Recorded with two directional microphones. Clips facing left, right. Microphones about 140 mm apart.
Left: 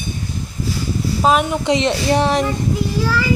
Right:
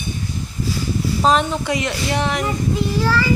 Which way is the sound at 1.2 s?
10° left (ahead or behind).